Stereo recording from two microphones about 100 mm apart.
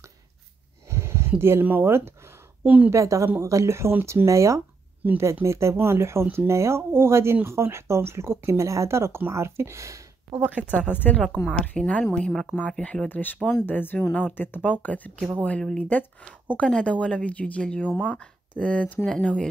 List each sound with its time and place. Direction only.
0.8 s a sound: 25° right (ahead or behind)
1.4 s speech: 20° right (ahead or behind)
2.6 s a woman's voice: 15° right (ahead or behind)
2.9 s a woman's voice: 30° right (ahead or behind)
10.4 s a woman's voice: 15° right (ahead or behind)
11.3 s speech: 15° left (ahead or behind)